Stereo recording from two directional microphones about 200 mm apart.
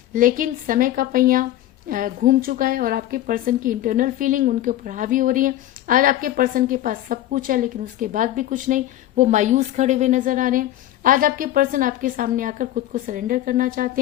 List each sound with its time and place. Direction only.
0.1 s a woman's voice: 40° right (ahead or behind)